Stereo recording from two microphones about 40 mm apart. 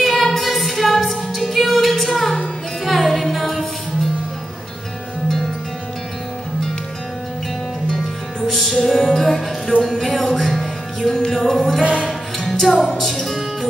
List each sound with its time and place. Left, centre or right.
0.0 s music: centre
7.9 s music: centre
11.1 s music: centre
11.3 s music: centre